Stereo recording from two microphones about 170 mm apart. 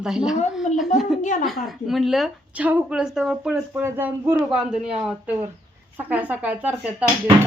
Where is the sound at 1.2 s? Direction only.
45° left (ahead or behind).